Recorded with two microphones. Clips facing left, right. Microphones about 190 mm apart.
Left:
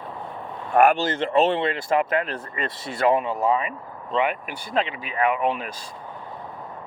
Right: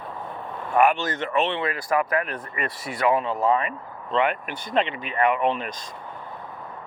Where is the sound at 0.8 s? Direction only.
45° left (ahead or behind).